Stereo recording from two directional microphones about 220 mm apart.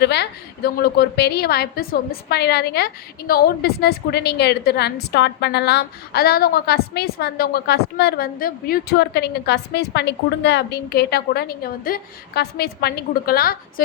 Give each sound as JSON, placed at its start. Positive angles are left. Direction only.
{"t": 0.0, "sound": "a woman's voice", "side_deg": 50}